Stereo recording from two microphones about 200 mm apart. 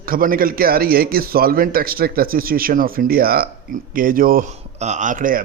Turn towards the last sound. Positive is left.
turn(degrees=-45)  # may be behind; listen again after turning